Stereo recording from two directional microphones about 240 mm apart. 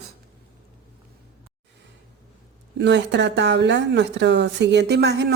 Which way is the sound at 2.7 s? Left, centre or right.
Right.